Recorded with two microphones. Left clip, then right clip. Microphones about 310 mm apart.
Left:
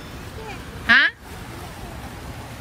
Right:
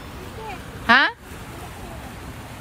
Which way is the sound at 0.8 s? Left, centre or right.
Centre.